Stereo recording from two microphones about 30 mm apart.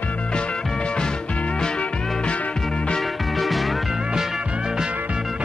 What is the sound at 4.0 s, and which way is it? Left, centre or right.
Music, right.